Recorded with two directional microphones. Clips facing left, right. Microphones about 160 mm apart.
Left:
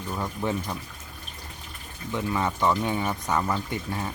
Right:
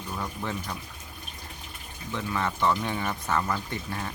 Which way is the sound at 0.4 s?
15° left (ahead or behind).